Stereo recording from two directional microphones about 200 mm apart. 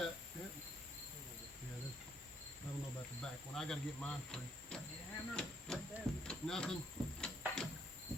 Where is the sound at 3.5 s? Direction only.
Centre (ahead or behind).